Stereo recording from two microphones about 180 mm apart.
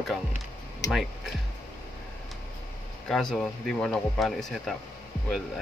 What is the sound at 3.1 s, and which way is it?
Speech, 5° left (ahead or behind).